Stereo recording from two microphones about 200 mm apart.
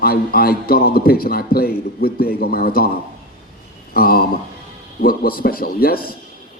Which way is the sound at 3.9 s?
50° left (ahead or behind).